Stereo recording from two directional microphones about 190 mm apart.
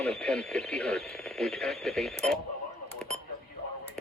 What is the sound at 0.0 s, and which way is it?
Speech, centre (ahead or behind).